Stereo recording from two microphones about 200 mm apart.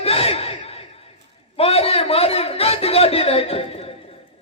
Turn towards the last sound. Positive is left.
turn(degrees=30)  # may be behind; listen again after turning